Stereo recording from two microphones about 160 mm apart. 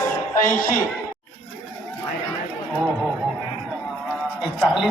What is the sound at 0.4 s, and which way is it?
Speech, 60° left (ahead or behind).